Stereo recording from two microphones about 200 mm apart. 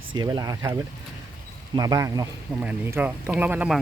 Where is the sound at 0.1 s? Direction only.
20° right (ahead or behind).